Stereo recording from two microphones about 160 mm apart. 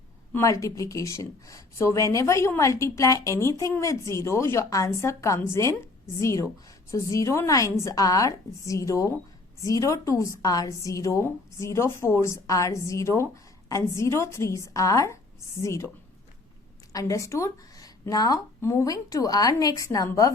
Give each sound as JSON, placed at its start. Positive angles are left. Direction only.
{"t": 0.3, "sound": "a woman's voice", "side_deg": 20}
{"t": 16.9, "sound": "a woman's voice", "side_deg": 20}